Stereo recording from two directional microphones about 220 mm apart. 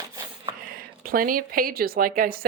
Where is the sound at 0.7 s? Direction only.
40° right (ahead or behind).